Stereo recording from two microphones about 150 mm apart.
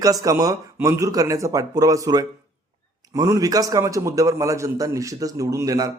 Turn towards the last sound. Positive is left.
turn(degrees=-25)  # may be behind; listen again after turning